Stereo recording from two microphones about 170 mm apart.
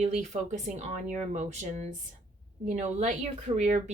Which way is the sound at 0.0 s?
45° right (ahead or behind).